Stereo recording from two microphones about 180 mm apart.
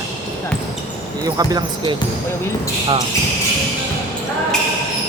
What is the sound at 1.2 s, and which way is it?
Speech, 20° right (ahead or behind).